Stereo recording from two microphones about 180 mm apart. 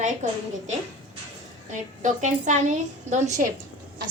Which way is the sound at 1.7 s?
45° right (ahead or behind).